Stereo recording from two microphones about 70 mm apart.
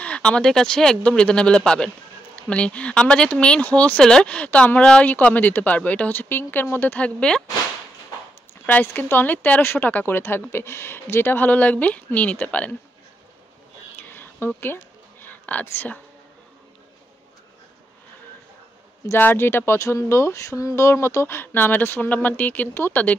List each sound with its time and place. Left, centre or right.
0.0 s speech: centre
7.0 s speech: centre
8.8 s speech: left
13.9 s a sound: left
15.6 s speech: left
19.1 s speech: left
19.8 s speech: left